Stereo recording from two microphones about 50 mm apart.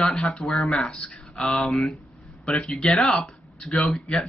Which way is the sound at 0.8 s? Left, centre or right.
Centre.